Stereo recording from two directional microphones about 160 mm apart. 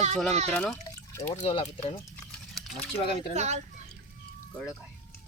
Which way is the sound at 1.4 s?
35° left (ahead or behind).